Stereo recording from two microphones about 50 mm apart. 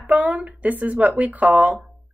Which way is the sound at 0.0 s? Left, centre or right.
Right.